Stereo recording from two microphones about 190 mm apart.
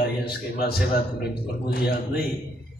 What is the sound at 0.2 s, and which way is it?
A man's voice, 55° left (ahead or behind).